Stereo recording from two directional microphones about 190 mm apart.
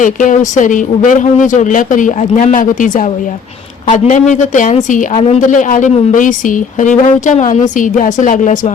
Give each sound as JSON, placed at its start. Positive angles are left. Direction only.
{"t": 0.0, "sound": "speech", "side_deg": 45}